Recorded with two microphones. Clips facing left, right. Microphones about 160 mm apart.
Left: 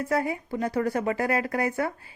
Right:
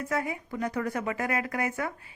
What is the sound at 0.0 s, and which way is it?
Speech, 35° left (ahead or behind).